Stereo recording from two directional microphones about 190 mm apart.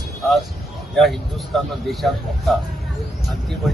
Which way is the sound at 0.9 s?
Centre (ahead or behind).